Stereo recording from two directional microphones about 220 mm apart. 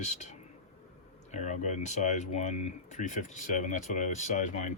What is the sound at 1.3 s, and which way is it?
Speech, 35° left (ahead or behind).